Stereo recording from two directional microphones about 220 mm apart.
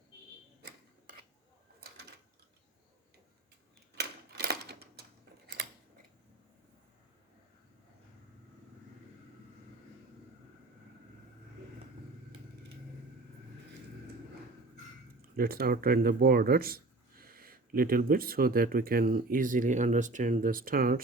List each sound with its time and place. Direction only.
0.6 s mechanisms: 40° right (ahead or behind)
3.9 s a sound: 45° right (ahead or behind)
15.4 s speech: 45° right (ahead or behind)